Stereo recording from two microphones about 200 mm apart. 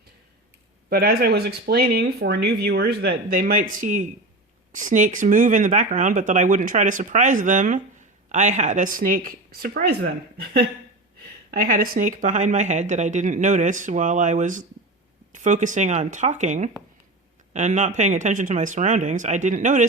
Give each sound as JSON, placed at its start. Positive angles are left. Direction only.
{"t": 0.9, "sound": "speech", "side_deg": -50}